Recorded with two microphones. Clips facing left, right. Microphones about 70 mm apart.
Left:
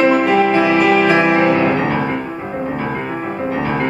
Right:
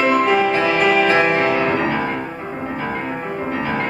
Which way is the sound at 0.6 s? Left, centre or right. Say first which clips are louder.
Left 3 dB; centre.